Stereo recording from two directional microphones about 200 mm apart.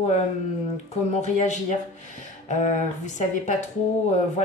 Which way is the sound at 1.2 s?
35° left (ahead or behind).